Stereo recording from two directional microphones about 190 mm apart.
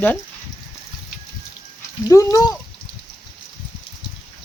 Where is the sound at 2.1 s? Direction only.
15° left (ahead or behind).